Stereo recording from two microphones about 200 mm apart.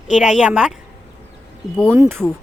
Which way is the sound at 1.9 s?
10° right (ahead or behind).